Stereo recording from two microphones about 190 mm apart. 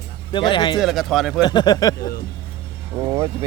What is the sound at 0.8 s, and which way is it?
Speech, centre (ahead or behind).